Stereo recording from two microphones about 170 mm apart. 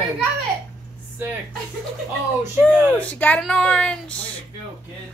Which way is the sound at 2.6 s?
10° left (ahead or behind).